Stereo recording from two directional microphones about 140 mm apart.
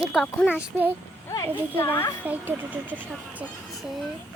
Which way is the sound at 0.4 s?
10° right (ahead or behind).